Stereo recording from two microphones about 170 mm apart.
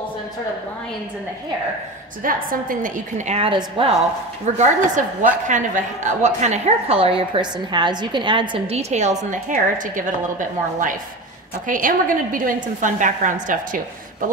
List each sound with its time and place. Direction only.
2.2 s a woman's voice: 55° right (ahead or behind); by 3.9 s 30° right (ahead or behind)
4.6 s a woman's voice: 45° right (ahead or behind)
11.6 s a woman's voice: 50° right (ahead or behind)